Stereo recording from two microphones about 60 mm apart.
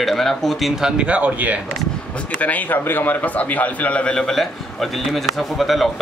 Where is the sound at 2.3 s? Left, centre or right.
Left.